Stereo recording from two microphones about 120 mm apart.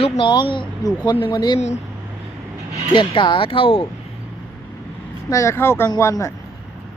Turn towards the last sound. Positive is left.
turn(degrees=30)  # may be behind; listen again after turning